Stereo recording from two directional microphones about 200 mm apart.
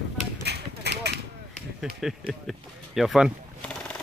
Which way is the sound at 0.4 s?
55° right (ahead or behind).